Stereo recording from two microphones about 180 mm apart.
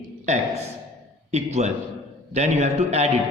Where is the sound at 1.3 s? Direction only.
40° right (ahead or behind).